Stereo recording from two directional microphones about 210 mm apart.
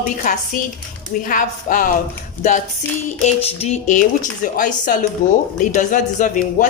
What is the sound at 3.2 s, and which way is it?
A woman's voice, 30° left (ahead or behind).